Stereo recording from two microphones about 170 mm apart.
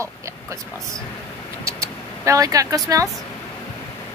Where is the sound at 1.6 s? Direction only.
20° right (ahead or behind).